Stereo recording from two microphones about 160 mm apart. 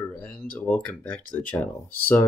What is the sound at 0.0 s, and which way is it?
Speech, 10° left (ahead or behind).